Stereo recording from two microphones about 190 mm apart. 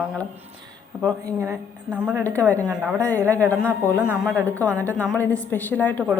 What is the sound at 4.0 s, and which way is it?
Speech, 5° right (ahead or behind).